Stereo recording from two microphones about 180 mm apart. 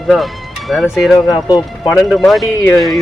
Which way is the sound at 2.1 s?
Centre (ahead or behind).